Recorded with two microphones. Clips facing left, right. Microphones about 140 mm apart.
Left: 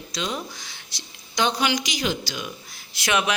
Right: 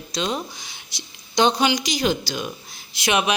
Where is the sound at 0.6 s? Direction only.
15° right (ahead or behind).